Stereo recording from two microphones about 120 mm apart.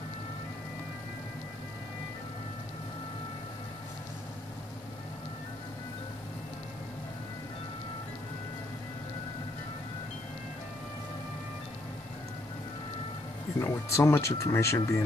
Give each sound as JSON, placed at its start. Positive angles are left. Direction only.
{"t": 13.6, "sound": "speech", "side_deg": 20}